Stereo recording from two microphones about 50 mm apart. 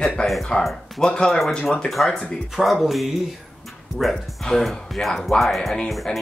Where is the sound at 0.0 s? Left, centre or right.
Centre.